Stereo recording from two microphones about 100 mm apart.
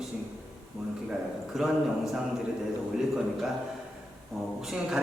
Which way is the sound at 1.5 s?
5° right (ahead or behind).